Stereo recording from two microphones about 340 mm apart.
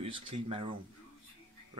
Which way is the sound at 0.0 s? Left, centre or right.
Centre.